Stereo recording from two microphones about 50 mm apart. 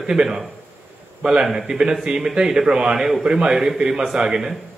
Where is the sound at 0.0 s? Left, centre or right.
Centre.